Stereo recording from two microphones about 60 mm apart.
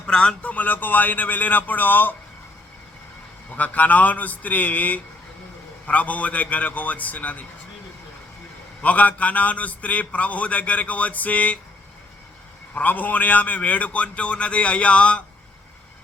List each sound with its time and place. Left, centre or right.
0.1 s speech: centre
0.5 s a man's voice: left
3.5 s a man's voice: left
8.8 s a man's voice: left
12.7 s a man's voice: left